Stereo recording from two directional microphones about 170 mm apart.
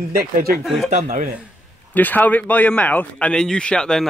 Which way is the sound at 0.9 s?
50° right (ahead or behind).